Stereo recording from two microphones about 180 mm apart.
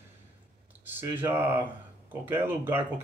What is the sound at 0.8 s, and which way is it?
Speech, 10° right (ahead or behind).